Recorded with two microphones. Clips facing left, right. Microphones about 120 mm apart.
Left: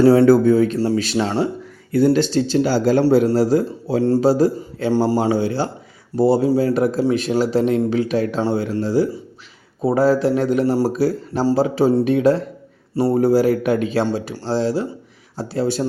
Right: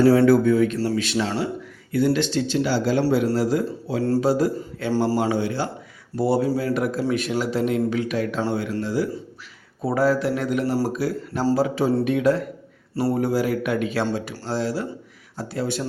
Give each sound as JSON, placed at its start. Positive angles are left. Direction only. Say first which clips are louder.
{"t": 0.0, "sound": "speech", "louder": "left 4 dB", "side_deg": 40}